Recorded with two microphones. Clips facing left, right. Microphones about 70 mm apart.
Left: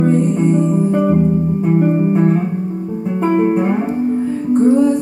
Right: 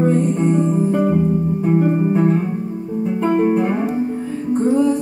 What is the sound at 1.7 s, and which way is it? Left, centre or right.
Music, centre.